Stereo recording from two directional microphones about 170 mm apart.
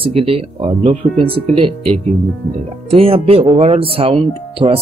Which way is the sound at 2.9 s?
35° right (ahead or behind).